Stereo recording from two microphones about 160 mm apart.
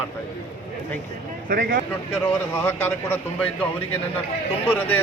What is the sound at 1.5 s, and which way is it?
Speech, 75° right (ahead or behind).